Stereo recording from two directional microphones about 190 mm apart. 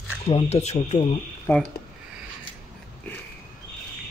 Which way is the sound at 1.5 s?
10° left (ahead or behind).